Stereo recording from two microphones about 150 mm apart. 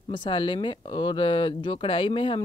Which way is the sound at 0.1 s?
35° left (ahead or behind).